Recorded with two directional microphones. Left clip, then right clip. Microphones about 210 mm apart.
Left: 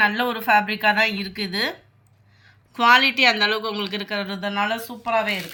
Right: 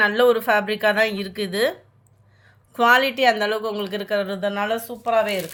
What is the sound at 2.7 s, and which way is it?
A woman's voice, 45° right (ahead or behind).